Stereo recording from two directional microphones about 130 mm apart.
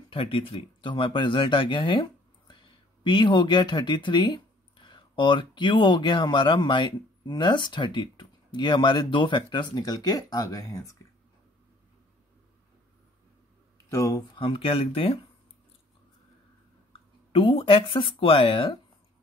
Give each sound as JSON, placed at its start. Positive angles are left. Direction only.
{"t": 0.1, "sound": "speech", "side_deg": 45}
{"t": 13.8, "sound": "speech", "side_deg": 25}
{"t": 14.3, "sound": "speech", "side_deg": 40}
{"t": 17.3, "sound": "speech", "side_deg": 45}